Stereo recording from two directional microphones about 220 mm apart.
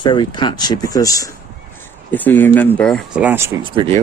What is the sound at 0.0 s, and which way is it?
Speech, 20° left (ahead or behind).